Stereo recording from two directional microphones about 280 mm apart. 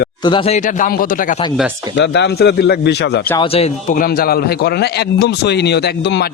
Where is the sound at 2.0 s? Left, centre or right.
Left.